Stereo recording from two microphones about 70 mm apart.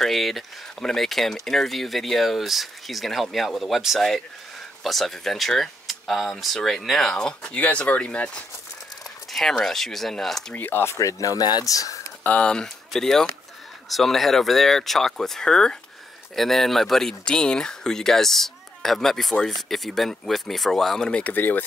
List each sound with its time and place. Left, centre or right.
0.0 s speech: centre
9.3 s speech: centre
10.5 s speech: left
10.9 s speech: left
11.6 s speech: left
12.2 s speech: centre
21.1 s speech: left